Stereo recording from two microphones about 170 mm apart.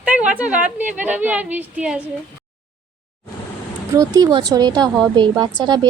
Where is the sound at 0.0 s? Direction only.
5° right (ahead or behind).